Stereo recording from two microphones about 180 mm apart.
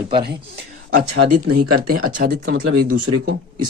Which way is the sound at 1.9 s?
50° right (ahead or behind).